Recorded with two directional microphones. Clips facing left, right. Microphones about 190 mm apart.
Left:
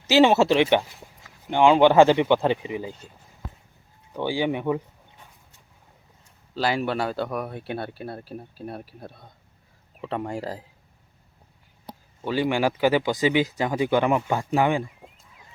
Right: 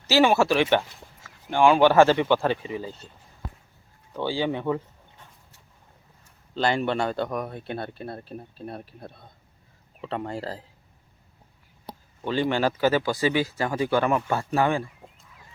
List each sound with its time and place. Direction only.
0.1 s speech: 20° left (ahead or behind)
4.1 s speech: 15° left (ahead or behind)
6.5 s speech: 5° left (ahead or behind)
12.2 s speech: 10° left (ahead or behind)